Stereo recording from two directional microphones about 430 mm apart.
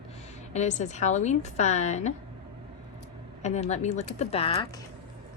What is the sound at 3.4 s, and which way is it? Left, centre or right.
A woman's voice, centre.